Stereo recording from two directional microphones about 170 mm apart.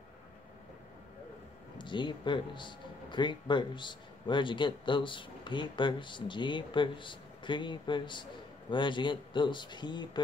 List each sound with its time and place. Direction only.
1.8 s speech: 30° left (ahead or behind)